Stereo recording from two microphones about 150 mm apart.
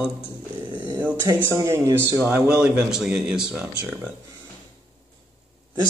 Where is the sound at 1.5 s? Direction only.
20° right (ahead or behind).